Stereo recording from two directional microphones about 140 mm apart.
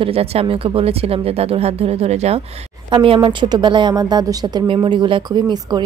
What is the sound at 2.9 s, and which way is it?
A woman's voice, 35° right (ahead or behind).